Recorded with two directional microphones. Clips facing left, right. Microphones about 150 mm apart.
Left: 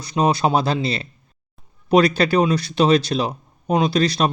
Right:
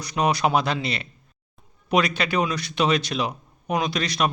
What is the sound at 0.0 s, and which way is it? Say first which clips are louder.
A man's voice: left 3 dB; 25° left (ahead or behind).